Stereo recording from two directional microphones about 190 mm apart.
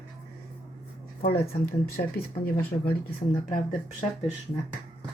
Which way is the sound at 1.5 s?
55° left (ahead or behind).